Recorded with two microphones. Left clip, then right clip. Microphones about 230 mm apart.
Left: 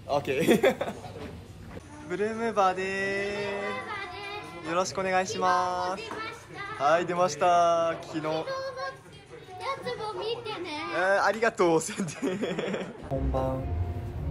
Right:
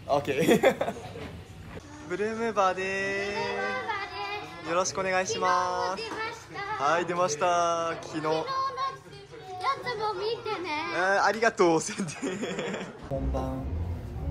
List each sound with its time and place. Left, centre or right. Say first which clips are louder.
0.1 s speech: right 1 dB; centre
2.0 s speech: even; centre
9.6 s music: right 4 dB; centre
10.9 s speech: left 1 dB; centre